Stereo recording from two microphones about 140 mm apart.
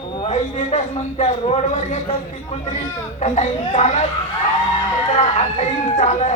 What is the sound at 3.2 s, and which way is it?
Speech, 55° left (ahead or behind).